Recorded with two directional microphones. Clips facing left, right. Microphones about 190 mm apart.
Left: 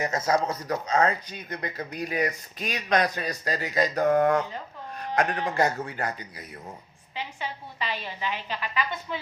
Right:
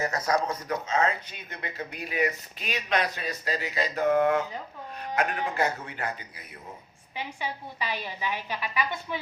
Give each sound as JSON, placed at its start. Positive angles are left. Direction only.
{"t": 0.0, "sound": "a man's voice", "side_deg": 20}
{"t": 0.9, "sound": "speech", "side_deg": 40}
{"t": 7.2, "sound": "a woman's voice", "side_deg": -10}